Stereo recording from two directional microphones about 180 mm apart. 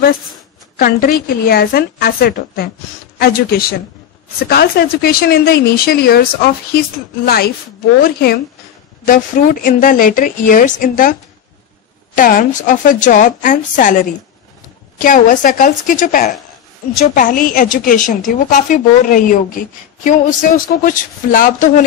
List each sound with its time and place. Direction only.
0.7 s a woman's voice: 50° left (ahead or behind)
7.2 s a woman's voice: 60° left (ahead or behind)
12.2 s a woman's voice: 50° left (ahead or behind)
15.0 s a woman's voice: 45° left (ahead or behind)